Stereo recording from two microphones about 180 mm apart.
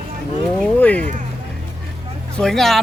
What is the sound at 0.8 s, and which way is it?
Speech, 10° left (ahead or behind).